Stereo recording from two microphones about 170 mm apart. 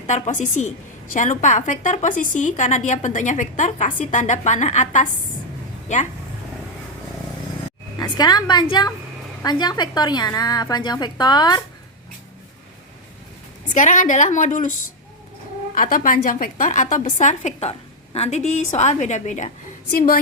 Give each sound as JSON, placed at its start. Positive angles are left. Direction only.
{"t": 0.1, "sound": "a woman's voice", "side_deg": 45}
{"t": 7.9, "sound": "a woman's voice", "side_deg": 25}
{"t": 13.7, "sound": "a woman's voice", "side_deg": 50}
{"t": 15.7, "sound": "a woman's voice", "side_deg": 55}
{"t": 19.9, "sound": "a woman's voice", "side_deg": 55}